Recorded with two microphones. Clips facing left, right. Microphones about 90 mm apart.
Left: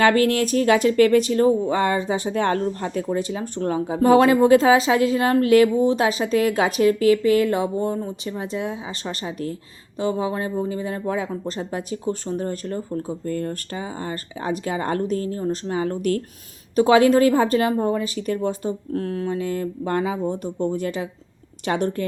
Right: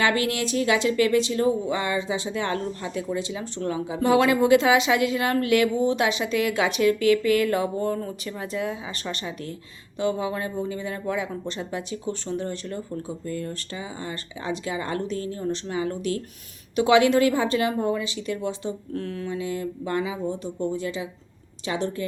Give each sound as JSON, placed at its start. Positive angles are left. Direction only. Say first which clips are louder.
{"t": 0.0, "sound": "speech", "louder": "left 6 dB", "side_deg": 45}
{"t": 16.7, "sound": "a woman's voice", "louder": "left 3 dB", "side_deg": 40}